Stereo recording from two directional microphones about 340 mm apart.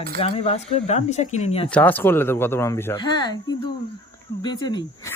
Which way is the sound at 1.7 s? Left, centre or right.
Centre.